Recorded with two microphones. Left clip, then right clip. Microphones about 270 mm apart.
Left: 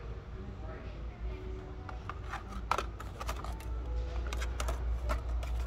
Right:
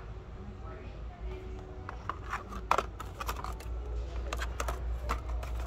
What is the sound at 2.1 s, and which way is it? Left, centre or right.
Rub, centre.